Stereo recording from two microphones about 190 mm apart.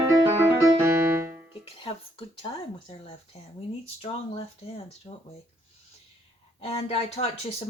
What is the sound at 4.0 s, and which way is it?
Speech, 30° left (ahead or behind).